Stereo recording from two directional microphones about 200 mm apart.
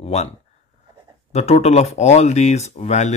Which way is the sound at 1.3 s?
35° left (ahead or behind).